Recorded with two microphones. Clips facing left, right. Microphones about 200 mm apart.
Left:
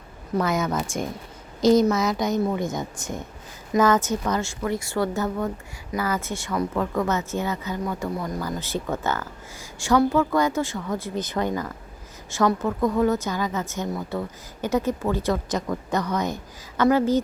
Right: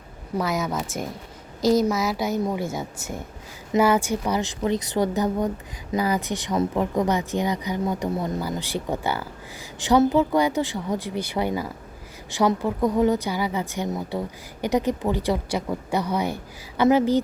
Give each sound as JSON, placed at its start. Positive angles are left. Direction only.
{"t": 0.3, "sound": "a woman's voice", "side_deg": 0}
{"t": 8.4, "sound": "a woman's voice", "side_deg": -15}